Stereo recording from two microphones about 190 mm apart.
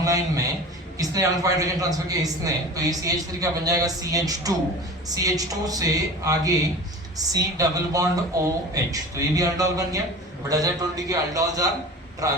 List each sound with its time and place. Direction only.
0.0 s a man's voice: 20° right (ahead or behind)